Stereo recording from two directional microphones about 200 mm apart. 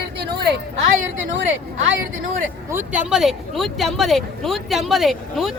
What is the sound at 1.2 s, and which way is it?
Speech, 65° right (ahead or behind).